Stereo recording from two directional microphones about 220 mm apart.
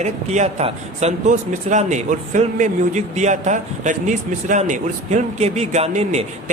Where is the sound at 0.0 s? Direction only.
30° right (ahead or behind).